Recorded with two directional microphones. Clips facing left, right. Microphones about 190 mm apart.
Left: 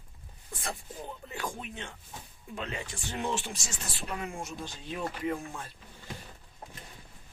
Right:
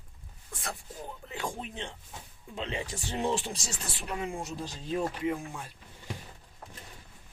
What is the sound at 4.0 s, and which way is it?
Speech, 15° right (ahead or behind).